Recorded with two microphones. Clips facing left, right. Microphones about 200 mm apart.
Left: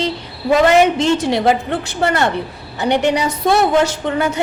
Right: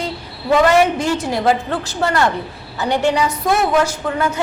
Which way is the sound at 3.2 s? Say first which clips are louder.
Left 3 dB; 40° left (ahead or behind).